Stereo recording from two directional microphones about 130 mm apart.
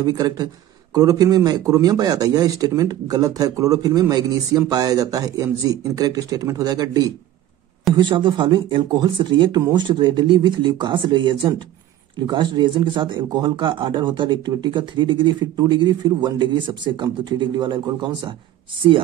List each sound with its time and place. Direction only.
0.0 s a man's voice: 30° right (ahead or behind)